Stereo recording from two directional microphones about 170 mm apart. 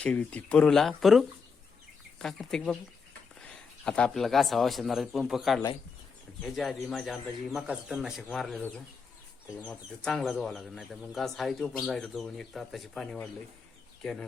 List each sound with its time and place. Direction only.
0.0 s a man's voice: 5° left (ahead or behind)
9.6 s speech: 5° left (ahead or behind)